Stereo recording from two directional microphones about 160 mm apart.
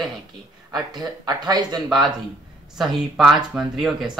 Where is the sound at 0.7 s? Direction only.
25° right (ahead or behind).